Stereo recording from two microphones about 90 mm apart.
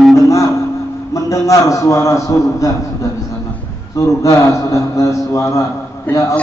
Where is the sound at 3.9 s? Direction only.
40° left (ahead or behind).